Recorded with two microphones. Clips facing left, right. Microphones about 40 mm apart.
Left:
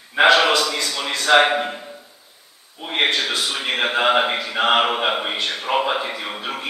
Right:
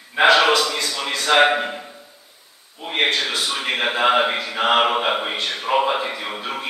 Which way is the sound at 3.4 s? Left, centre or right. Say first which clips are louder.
Even; centre.